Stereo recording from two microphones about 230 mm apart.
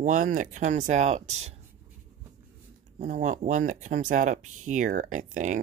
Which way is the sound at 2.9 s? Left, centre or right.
Right.